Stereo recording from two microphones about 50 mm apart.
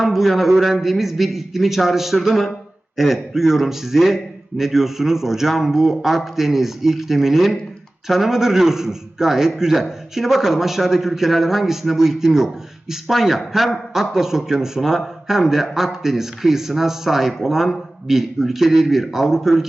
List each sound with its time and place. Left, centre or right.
0.0 s a man's voice: centre